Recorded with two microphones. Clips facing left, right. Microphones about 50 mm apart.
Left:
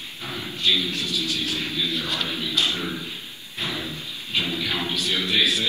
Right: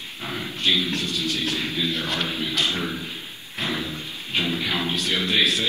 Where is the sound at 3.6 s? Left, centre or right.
Right.